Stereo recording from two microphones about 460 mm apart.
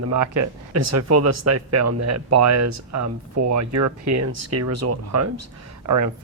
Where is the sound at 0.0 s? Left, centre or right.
Right.